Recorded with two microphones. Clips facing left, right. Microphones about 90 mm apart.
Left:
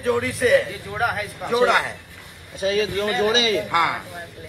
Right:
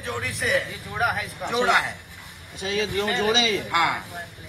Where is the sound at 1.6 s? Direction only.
20° left (ahead or behind).